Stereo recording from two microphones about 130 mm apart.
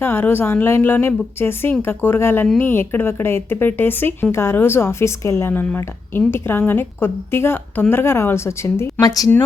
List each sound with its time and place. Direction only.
0.0 s speech: 15° left (ahead or behind)